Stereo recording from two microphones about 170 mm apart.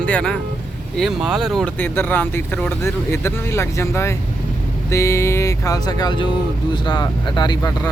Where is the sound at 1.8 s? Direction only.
10° left (ahead or behind).